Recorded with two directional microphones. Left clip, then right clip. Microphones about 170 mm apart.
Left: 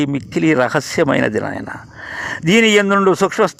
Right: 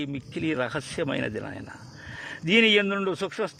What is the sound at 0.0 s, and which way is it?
Speech, 45° left (ahead or behind).